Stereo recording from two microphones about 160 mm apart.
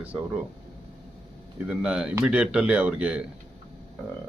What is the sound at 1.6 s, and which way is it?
Speech, 5° right (ahead or behind).